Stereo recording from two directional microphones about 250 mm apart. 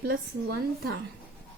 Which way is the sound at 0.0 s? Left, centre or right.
Right.